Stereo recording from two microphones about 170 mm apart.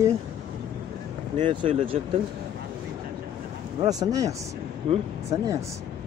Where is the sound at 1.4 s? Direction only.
30° right (ahead or behind).